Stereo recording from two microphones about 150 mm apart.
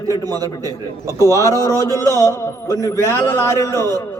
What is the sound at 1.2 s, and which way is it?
Speech, 20° right (ahead or behind).